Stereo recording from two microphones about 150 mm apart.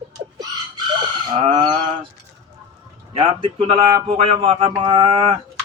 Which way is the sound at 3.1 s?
35° right (ahead or behind).